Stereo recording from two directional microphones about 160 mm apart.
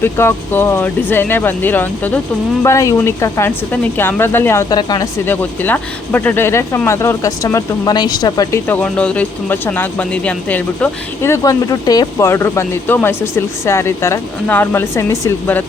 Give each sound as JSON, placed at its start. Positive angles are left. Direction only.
{"t": 0.0, "sound": "speech", "side_deg": 15}
{"t": 5.2, "sound": "speech", "side_deg": 10}
{"t": 8.6, "sound": "speech", "side_deg": 10}